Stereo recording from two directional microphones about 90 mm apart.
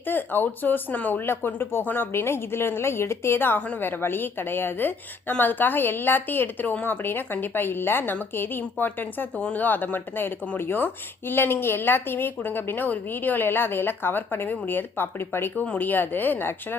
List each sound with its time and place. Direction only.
0.1 s speech: 20° left (ahead or behind)